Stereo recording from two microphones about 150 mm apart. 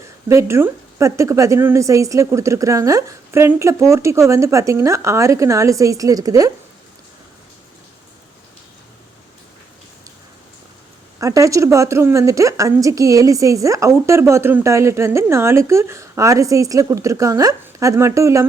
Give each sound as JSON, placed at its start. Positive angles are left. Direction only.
{"t": 0.3, "sound": "a woman's voice", "side_deg": -20}
{"t": 11.2, "sound": "a woman's voice", "side_deg": -20}